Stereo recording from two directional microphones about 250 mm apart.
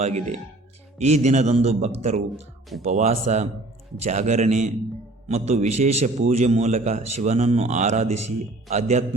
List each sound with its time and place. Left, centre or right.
0.0 s a man's voice: right
2.3 s speech: centre
2.8 s a man's voice: right